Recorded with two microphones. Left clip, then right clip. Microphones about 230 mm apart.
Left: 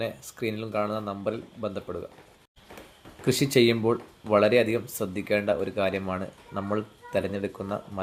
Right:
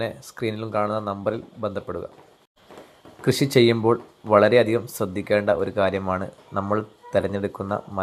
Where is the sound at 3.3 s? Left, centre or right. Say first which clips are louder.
Right 4 dB; centre.